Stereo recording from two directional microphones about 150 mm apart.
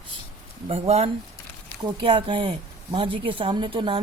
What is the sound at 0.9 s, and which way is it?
Speech, 45° right (ahead or behind).